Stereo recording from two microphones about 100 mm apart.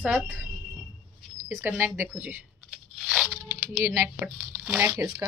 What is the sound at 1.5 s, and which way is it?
Speech, 25° right (ahead or behind).